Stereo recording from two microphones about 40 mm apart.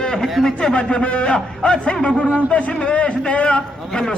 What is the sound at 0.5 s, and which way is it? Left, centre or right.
Speech, left.